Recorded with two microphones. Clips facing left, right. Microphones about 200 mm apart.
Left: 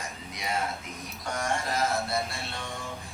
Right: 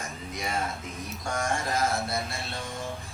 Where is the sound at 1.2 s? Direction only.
45° right (ahead or behind).